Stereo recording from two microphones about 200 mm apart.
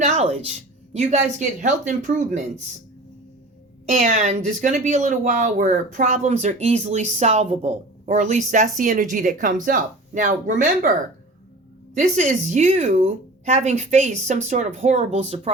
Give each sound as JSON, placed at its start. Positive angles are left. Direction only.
{"t": 0.0, "sound": "a sound", "side_deg": -35}
{"t": 0.9, "sound": "speech", "side_deg": -35}
{"t": 3.8, "sound": "speech", "side_deg": -35}
{"t": 11.9, "sound": "speech", "side_deg": -35}